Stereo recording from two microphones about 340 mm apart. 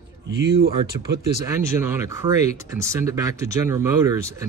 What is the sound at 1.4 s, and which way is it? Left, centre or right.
Speech, centre.